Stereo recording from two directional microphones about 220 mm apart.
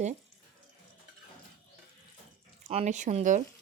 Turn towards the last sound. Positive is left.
turn(degrees=-35)  # may be behind; listen again after turning